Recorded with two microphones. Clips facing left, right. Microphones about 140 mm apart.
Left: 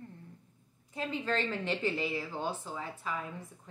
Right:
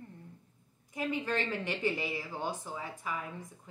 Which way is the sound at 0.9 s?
15° right (ahead or behind).